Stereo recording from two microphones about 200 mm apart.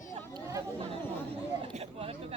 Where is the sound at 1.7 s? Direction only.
30° right (ahead or behind).